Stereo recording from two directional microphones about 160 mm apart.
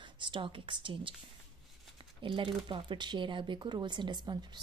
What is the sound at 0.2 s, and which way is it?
Speech, 30° right (ahead or behind).